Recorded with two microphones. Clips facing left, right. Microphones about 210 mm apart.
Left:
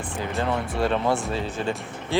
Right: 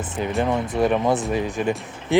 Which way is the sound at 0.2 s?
15° right (ahead or behind).